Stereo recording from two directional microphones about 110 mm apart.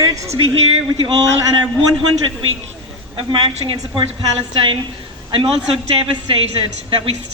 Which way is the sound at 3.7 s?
60° right (ahead or behind).